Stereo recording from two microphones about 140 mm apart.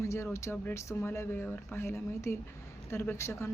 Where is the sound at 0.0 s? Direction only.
20° left (ahead or behind).